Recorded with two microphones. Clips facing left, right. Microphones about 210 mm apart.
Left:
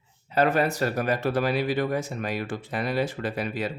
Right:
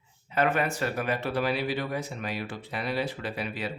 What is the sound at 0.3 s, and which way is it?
Speech, 35° left (ahead or behind).